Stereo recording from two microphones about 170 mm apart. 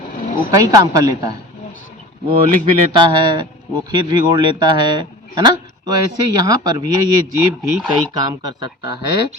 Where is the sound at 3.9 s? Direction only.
25° right (ahead or behind).